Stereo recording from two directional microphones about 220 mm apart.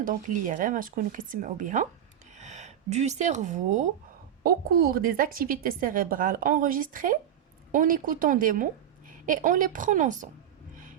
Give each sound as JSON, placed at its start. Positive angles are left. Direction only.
{"t": 0.0, "sound": "a woman's voice", "side_deg": -40}
{"t": 4.4, "sound": "a woman's voice", "side_deg": -45}